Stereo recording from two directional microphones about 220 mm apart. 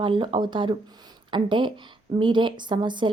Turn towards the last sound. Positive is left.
turn(degrees=-20)  # may be behind; listen again after turning